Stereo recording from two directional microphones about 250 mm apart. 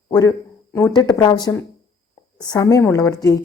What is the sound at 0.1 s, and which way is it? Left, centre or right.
A woman's voice, centre.